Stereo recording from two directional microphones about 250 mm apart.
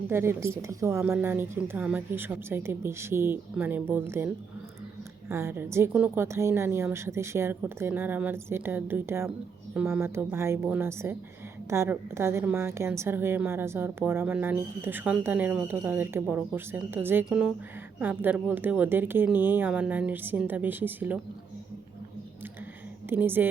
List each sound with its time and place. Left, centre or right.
0.1 s a woman's voice: centre
5.3 s a woman's voice: centre
23.0 s a woman's voice: centre